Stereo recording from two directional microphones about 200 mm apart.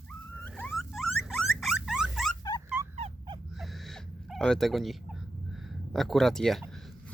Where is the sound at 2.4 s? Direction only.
20° left (ahead or behind).